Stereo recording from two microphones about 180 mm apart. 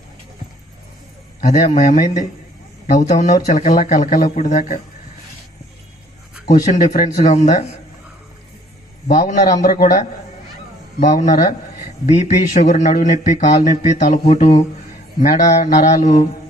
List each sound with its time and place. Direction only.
1.4 s speech: 45° left (ahead or behind)
6.5 s speech: 45° left (ahead or behind)
9.0 s speech: 45° left (ahead or behind)
15.2 s mantra: 40° left (ahead or behind)